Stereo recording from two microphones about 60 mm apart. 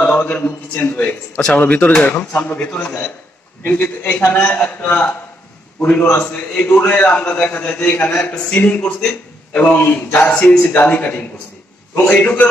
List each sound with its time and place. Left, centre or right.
0.0 s a man's voice: left